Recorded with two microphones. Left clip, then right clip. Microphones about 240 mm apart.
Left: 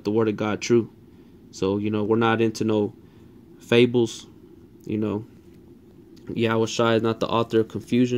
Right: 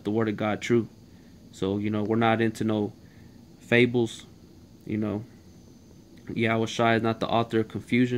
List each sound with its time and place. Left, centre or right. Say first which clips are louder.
0.0 s speech: left 4 dB; centre
6.2 s speech: left 3 dB; centre